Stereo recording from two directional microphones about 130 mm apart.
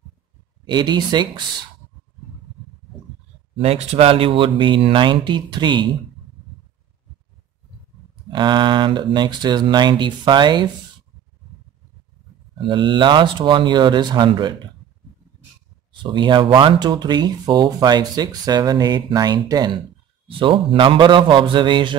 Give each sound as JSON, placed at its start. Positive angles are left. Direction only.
{"t": 0.7, "sound": "speech", "side_deg": -35}
{"t": 3.6, "sound": "speech", "side_deg": -50}
{"t": 8.3, "sound": "speech", "side_deg": -35}
{"t": 12.5, "sound": "speech", "side_deg": -40}
{"t": 15.9, "sound": "speech", "side_deg": -40}
{"t": 20.2, "sound": "speech", "side_deg": -40}